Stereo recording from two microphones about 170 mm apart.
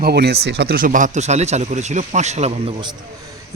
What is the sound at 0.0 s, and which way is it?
Speech, 70° right (ahead or behind).